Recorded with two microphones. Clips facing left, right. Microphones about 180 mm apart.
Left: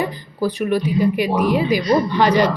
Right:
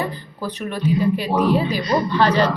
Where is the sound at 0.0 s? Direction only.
10° left (ahead or behind).